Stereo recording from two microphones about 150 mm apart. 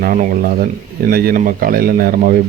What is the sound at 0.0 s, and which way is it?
Speech, 70° right (ahead or behind).